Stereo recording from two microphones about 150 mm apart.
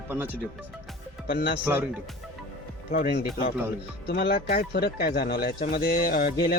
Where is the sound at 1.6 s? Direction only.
15° right (ahead or behind).